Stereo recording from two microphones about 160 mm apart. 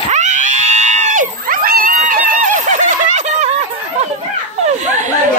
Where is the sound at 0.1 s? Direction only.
50° right (ahead or behind).